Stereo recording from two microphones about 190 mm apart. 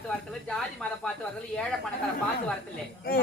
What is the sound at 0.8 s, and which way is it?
Speech, 5° left (ahead or behind).